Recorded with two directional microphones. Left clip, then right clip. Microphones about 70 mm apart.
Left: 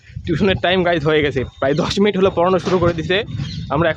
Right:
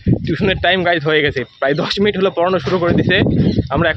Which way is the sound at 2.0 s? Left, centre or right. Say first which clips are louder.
Left 2 dB; left.